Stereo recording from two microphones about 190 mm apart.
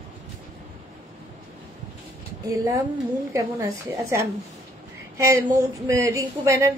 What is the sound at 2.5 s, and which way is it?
A woman's voice, 15° right (ahead or behind).